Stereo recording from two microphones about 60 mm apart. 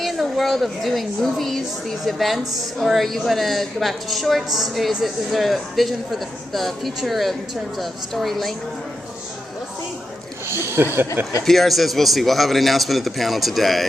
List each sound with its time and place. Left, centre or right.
0.0 s a woman's voice: centre
10.5 s speech: right
11.4 s a woman's voice: centre